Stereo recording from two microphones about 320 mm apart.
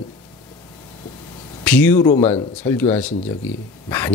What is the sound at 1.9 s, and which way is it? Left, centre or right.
Speech, left.